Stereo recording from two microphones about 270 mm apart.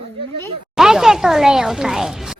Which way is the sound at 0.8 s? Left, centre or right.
Centre.